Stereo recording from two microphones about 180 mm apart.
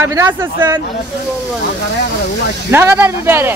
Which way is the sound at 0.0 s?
15° right (ahead or behind).